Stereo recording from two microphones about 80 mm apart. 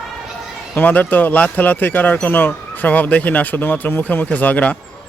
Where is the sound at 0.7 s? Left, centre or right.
Left.